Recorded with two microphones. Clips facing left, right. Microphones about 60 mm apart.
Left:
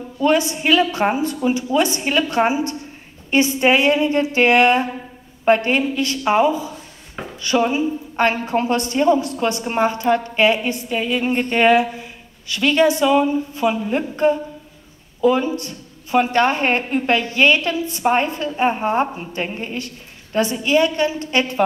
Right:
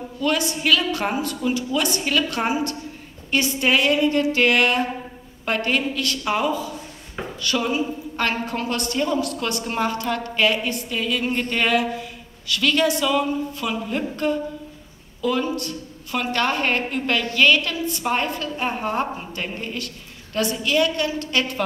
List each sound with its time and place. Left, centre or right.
0.2 s a woman's voice: left